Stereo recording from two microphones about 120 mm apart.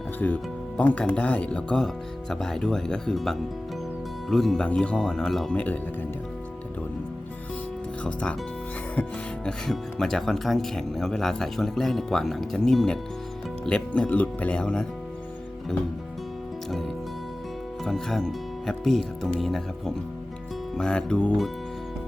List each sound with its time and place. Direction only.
0.2 s speech: 15° left (ahead or behind)
8.0 s speech: 10° left (ahead or behind)
9.5 s speech: 5° left (ahead or behind)
17.8 s speech: centre (ahead or behind)
20.7 s speech: 5° left (ahead or behind)